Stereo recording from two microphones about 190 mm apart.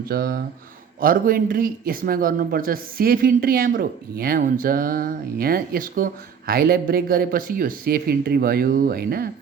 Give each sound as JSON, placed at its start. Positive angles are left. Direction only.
{"t": 0.1, "sound": "speech", "side_deg": -55}